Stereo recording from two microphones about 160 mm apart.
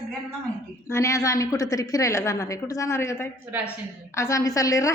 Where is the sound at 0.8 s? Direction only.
20° left (ahead or behind).